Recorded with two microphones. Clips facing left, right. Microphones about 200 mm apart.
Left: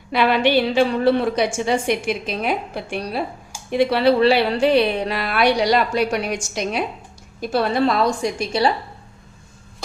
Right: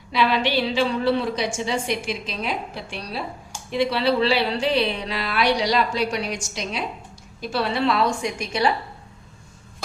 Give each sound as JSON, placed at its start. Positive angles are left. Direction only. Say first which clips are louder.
{"t": 0.1, "sound": "a woman's voice", "louder": "left 4 dB", "side_deg": 55}